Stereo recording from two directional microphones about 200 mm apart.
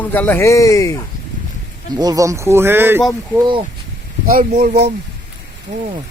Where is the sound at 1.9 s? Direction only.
20° right (ahead or behind).